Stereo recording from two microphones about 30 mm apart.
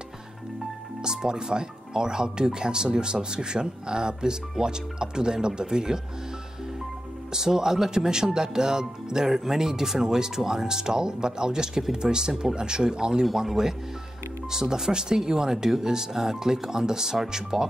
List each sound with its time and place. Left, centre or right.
1.0 s speech: right
7.3 s speech: centre
13.2 s speech: centre